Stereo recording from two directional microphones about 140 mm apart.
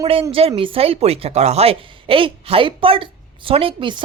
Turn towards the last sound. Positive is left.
turn(degrees=-40)  # may be behind; listen again after turning